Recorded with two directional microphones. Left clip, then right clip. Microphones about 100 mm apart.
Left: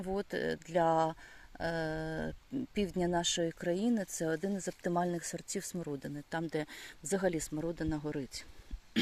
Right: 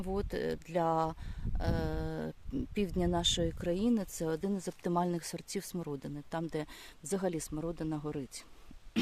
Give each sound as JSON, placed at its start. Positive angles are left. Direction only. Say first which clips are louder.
{"t": 0.0, "sound": "speech", "louder": "even", "side_deg": -20}
{"t": 6.3, "sound": "speech", "louder": "left 1 dB", "side_deg": -15}